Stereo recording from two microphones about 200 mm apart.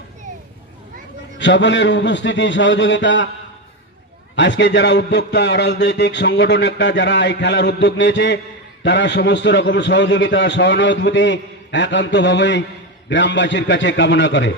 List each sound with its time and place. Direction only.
1.4 s a man's voice: 65° left (ahead or behind)
4.4 s a man's voice: 60° left (ahead or behind)